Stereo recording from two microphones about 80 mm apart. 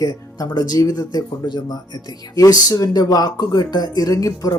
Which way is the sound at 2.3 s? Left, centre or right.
Left.